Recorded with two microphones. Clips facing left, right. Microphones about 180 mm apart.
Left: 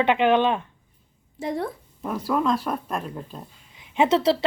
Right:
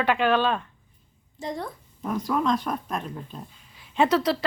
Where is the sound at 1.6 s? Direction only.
5° left (ahead or behind).